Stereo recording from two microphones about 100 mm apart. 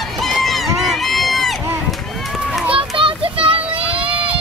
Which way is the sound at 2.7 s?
65° right (ahead or behind).